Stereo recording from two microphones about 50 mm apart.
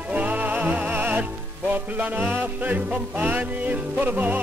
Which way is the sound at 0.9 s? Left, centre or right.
Right.